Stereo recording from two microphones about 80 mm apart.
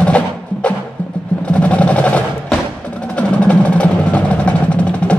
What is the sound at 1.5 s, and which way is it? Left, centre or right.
Percussion, centre.